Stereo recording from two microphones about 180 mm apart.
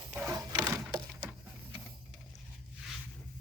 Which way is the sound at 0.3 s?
20° right (ahead or behind).